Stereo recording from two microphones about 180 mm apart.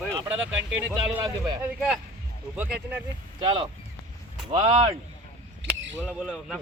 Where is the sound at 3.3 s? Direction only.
25° right (ahead or behind).